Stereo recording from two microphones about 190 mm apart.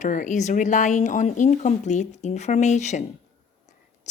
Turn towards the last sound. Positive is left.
turn(degrees=40)  # may be behind; listen again after turning